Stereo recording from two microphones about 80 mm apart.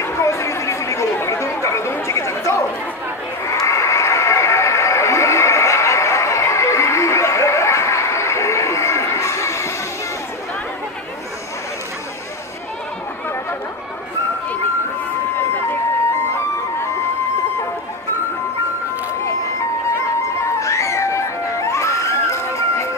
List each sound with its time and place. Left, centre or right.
0.0 s chatter: left
3.4 s a sound: left
15.3 s emergency vehicle: left
16.3 s music: left
20.2 s music: left